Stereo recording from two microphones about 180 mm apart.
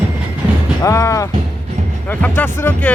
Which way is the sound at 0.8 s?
15° left (ahead or behind).